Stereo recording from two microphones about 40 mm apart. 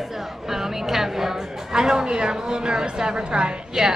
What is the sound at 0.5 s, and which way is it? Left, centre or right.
Speech, centre.